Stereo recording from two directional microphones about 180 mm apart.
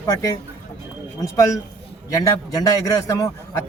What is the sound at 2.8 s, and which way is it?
Speech, 20° left (ahead or behind).